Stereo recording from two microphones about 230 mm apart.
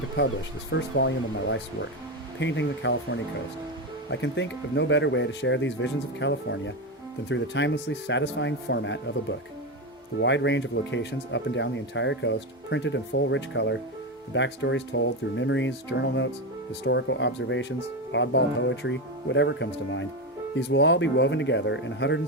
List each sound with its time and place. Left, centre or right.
0.7 s speech: left
10.2 s speech: left